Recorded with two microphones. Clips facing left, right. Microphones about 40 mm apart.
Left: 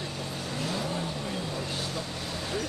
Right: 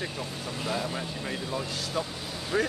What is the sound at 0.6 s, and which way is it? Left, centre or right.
Speech, right.